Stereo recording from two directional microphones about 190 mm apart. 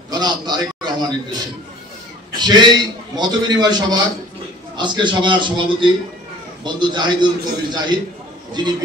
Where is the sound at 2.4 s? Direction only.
20° right (ahead or behind).